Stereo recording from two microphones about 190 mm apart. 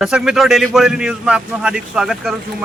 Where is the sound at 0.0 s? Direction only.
5° right (ahead or behind).